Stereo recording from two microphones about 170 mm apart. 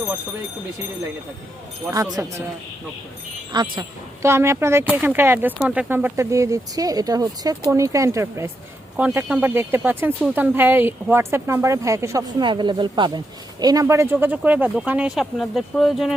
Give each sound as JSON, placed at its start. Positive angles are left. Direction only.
{"t": 1.9, "sound": "speech", "side_deg": -20}
{"t": 3.5, "sound": "speech", "side_deg": -25}